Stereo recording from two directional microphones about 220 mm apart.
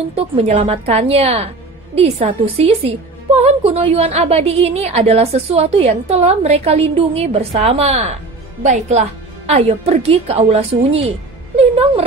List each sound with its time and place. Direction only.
0.1 s a woman's voice: 25° right (ahead or behind)